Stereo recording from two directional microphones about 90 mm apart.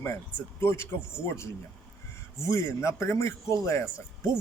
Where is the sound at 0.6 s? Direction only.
30° left (ahead or behind).